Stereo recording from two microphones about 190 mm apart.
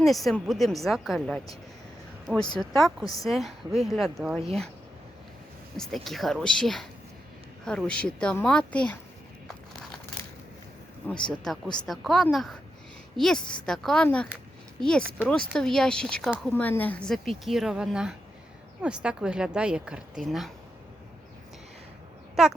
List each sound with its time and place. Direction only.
0.0 s a woman's voice: centre (ahead or behind)
2.6 s a woman's voice: centre (ahead or behind)
5.7 s a woman's voice: centre (ahead or behind)
11.0 s a woman's voice: 5° left (ahead or behind)